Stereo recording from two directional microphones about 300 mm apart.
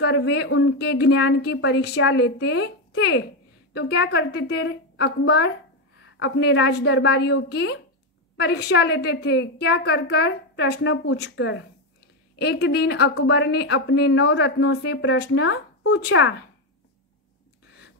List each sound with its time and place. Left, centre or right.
0.0 s a woman's voice: left